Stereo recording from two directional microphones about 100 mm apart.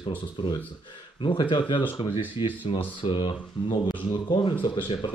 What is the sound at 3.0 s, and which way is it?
Speech, 55° left (ahead or behind).